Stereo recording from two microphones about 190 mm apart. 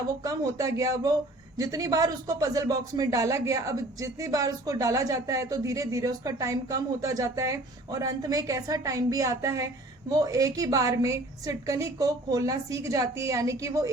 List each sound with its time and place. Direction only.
0.3 s speech: 15° right (ahead or behind)